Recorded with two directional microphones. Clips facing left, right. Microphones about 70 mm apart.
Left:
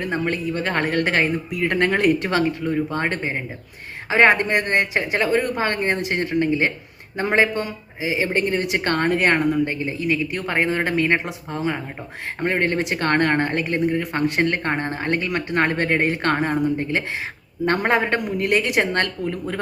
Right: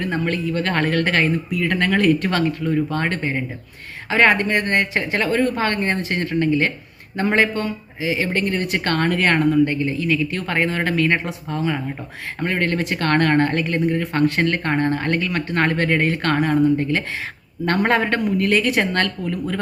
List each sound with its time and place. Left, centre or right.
0.0 s speech: centre
17.7 s speech: centre